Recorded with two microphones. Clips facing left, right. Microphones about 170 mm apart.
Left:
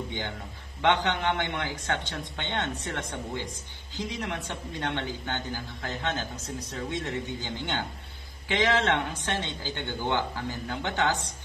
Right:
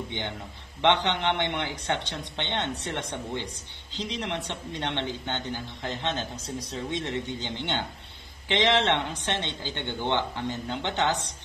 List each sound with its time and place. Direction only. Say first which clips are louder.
0.8 s a man's voice: right 1 dB; 20° right (ahead or behind)